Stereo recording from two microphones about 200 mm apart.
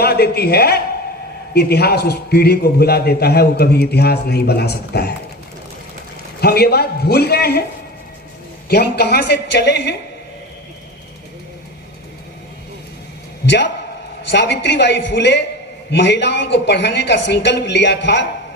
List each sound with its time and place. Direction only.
0.0 s a woman's voice: 50° left (ahead or behind)
6.4 s a man's voice: 50° left (ahead or behind)
8.6 s a woman's voice: 50° left (ahead or behind)
14.3 s a woman's voice: 60° left (ahead or behind)